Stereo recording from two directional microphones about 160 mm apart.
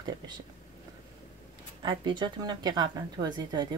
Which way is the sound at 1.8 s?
30° right (ahead or behind).